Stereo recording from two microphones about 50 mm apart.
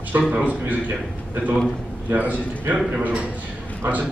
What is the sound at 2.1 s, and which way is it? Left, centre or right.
Speech, right.